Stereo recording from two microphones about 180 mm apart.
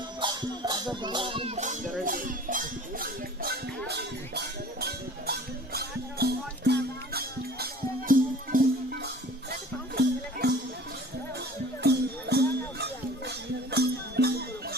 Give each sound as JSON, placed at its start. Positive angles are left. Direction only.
{"t": 0.2, "sound": "music", "side_deg": -25}
{"t": 1.0, "sound": "speech", "side_deg": -25}
{"t": 3.8, "sound": "music", "side_deg": -65}
{"t": 11.8, "sound": "music", "side_deg": -65}